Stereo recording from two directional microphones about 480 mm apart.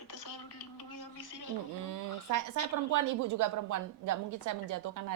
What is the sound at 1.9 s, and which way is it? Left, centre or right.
Speech, right.